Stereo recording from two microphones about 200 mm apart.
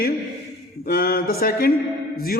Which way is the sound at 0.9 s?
50° left (ahead or behind).